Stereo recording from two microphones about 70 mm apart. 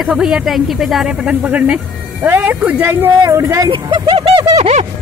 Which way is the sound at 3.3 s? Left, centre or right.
Right.